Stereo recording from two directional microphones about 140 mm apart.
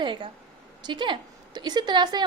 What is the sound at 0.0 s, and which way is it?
A woman's voice, 35° right (ahead or behind).